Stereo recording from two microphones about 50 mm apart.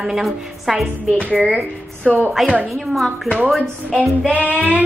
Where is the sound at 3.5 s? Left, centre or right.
Centre.